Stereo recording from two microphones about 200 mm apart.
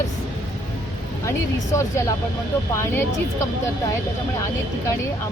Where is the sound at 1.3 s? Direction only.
15° left (ahead or behind).